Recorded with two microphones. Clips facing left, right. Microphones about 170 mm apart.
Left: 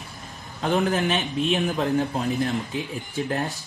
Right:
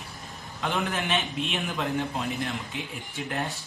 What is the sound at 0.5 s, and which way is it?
A man's voice, 40° left (ahead or behind).